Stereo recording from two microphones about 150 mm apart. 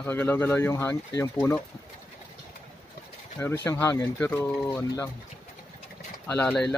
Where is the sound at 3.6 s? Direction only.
15° left (ahead or behind).